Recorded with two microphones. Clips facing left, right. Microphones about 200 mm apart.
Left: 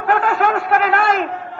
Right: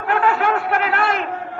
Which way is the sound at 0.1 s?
45° left (ahead or behind).